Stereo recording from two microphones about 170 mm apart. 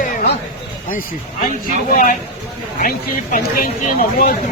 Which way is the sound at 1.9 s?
50° left (ahead or behind).